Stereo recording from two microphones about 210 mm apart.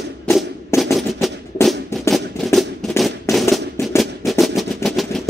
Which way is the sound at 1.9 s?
15° left (ahead or behind).